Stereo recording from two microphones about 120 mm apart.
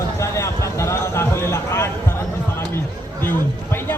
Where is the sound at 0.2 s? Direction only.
25° left (ahead or behind).